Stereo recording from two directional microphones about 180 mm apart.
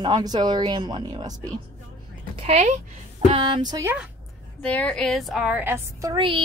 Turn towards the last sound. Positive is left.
turn(degrees=-25)  # may be behind; listen again after turning